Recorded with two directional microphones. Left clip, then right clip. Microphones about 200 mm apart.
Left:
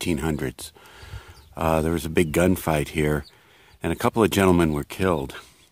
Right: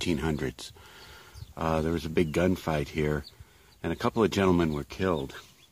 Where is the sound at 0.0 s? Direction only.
35° left (ahead or behind); by 5.5 s 50° left (ahead or behind).